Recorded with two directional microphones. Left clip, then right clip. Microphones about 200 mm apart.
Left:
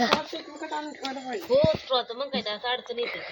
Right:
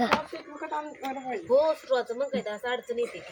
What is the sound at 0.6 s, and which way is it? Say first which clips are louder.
Speech: right 1 dB; 40° left (ahead or behind).